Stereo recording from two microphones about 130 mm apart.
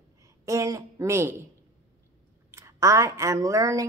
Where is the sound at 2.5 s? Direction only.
25° right (ahead or behind).